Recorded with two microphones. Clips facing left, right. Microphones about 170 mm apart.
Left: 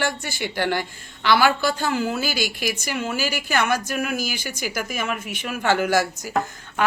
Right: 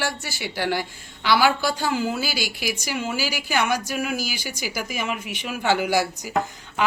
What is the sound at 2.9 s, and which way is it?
Speech, 10° right (ahead or behind).